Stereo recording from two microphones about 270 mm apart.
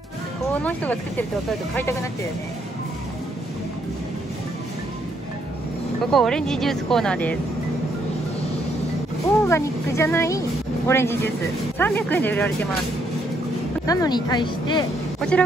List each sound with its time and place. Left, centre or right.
0.5 s a woman's voice: centre
6.1 s a woman's voice: centre
9.4 s speech: centre
13.8 s speech: centre
15.1 s speech: centre